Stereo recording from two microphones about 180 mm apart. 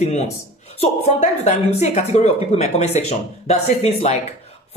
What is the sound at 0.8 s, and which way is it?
Speech, 35° left (ahead or behind).